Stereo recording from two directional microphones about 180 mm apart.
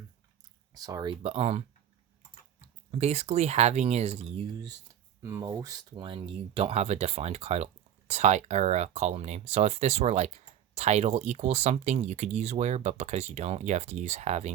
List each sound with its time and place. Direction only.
0.7 s speech: 20° right (ahead or behind)
1.2 s speech: 35° right (ahead or behind)
2.9 s speech: 35° right (ahead or behind)
5.2 s speech: 20° right (ahead or behind); by 14.5 s 40° right (ahead or behind)